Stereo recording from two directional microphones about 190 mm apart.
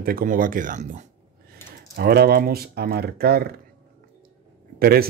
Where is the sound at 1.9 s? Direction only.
55° right (ahead or behind).